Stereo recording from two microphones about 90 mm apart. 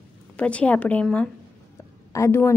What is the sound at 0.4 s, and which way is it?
Speech, 15° left (ahead or behind).